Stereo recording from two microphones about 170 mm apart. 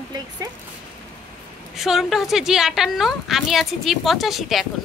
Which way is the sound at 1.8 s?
Centre (ahead or behind).